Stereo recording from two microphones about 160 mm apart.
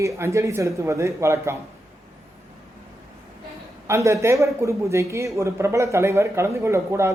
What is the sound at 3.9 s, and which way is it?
Speech, 20° right (ahead or behind).